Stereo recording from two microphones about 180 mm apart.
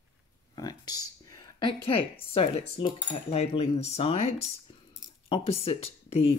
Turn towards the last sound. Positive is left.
turn(degrees=35)  # may be behind; listen again after turning